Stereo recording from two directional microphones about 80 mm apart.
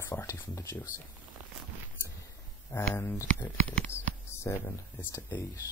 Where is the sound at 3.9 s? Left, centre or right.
Left.